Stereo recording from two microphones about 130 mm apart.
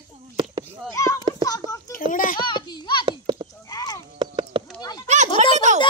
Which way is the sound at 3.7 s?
30° left (ahead or behind).